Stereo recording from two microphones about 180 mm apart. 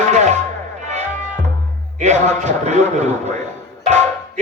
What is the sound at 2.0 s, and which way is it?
Speech, 40° right (ahead or behind).